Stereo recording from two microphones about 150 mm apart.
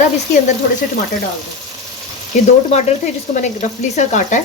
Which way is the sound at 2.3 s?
50° left (ahead or behind).